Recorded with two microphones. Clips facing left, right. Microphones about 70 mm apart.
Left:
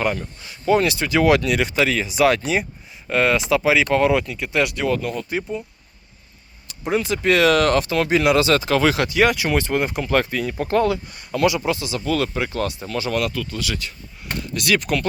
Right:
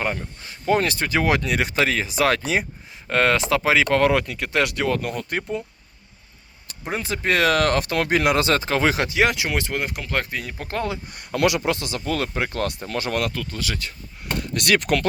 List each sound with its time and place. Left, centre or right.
0.0 s speech: right
0.4 s speech: right
6.9 s speech: right
8.7 s speech: right; by 10.8 s centre
11.1 s speech: right
14.5 s speech: right